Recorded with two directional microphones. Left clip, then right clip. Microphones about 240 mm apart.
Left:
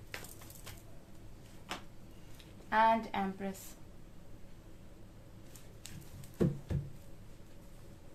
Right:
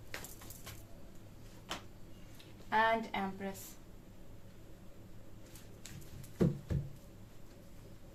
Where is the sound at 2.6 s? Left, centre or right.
Left.